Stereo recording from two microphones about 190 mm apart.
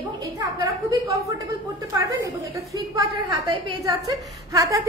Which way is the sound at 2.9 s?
20° right (ahead or behind).